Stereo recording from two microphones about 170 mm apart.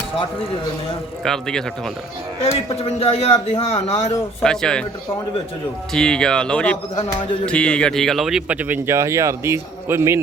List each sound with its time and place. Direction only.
1.2 s speech: 5° left (ahead or behind)
2.4 s a man's voice: 35° left (ahead or behind)
4.4 s speech: 5° left (ahead or behind)
5.9 s a man's voice: 5° left (ahead or behind); by 10.2 s 15° right (ahead or behind)